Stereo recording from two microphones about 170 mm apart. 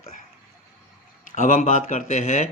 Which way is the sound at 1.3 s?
45° left (ahead or behind).